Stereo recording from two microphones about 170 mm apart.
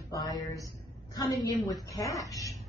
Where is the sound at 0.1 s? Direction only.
20° left (ahead or behind).